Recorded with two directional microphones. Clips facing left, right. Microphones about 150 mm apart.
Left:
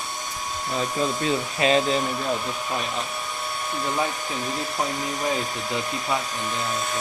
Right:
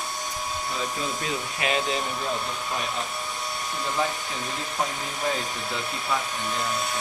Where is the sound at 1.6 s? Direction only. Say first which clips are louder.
Left 7 dB; 30° left (ahead or behind).